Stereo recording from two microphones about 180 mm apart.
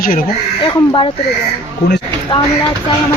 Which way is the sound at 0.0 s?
55° left (ahead or behind).